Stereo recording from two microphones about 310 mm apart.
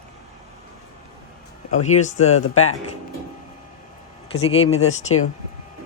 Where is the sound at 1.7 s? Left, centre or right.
Left.